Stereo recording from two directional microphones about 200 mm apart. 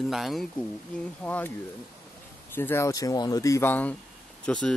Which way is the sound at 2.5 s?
10° left (ahead or behind).